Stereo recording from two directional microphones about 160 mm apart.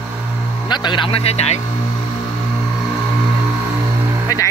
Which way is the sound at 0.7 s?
30° left (ahead or behind).